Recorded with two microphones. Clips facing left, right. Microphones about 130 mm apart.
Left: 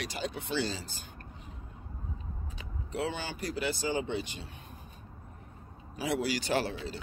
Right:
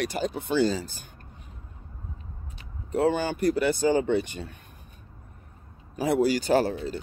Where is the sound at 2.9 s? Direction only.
45° right (ahead or behind).